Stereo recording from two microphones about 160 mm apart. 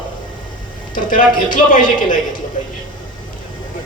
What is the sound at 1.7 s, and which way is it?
Speech, 55° left (ahead or behind).